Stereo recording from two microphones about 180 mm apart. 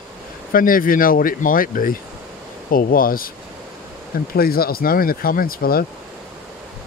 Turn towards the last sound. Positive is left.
turn(degrees=55)  # may be behind; listen again after turning